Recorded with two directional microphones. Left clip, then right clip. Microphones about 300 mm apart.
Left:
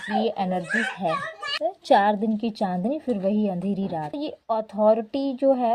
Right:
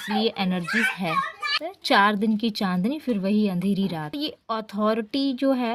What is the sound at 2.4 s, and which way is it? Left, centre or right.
Speech, right.